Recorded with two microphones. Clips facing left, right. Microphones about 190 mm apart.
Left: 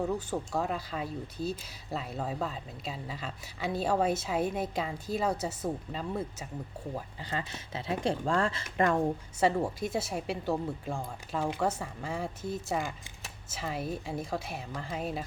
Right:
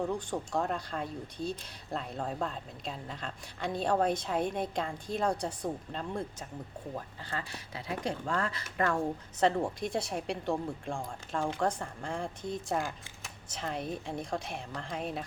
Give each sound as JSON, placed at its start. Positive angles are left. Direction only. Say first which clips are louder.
{"t": 0.0, "sound": "speech", "louder": "left 1 dB", "side_deg": 5}
{"t": 8.8, "sound": "speech", "louder": "left 3 dB", "side_deg": 15}